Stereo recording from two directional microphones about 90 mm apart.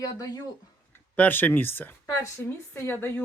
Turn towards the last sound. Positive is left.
turn(degrees=25)  # may be behind; listen again after turning